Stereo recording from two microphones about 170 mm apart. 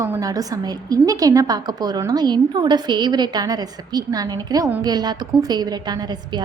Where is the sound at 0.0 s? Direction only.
15° right (ahead or behind).